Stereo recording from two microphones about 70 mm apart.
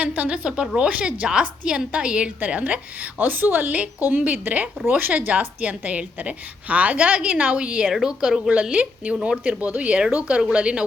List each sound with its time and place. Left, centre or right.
0.0 s a woman's voice: right
7.9 s a woman's voice: centre